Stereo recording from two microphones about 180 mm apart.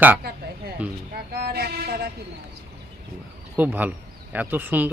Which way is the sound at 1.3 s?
65° right (ahead or behind).